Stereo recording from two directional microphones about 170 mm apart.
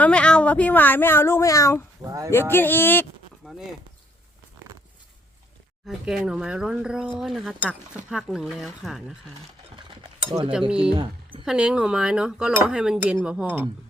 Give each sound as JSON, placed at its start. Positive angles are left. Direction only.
{"t": 0.0, "sound": "speech", "side_deg": 5}
{"t": 2.0, "sound": "speech", "side_deg": -20}
{"t": 2.3, "sound": "speech", "side_deg": 15}
{"t": 3.4, "sound": "a sound", "side_deg": 5}
{"t": 5.8, "sound": "speech", "side_deg": 0}
{"t": 10.9, "sound": "a sound", "side_deg": -30}
{"t": 11.4, "sound": "speech", "side_deg": -5}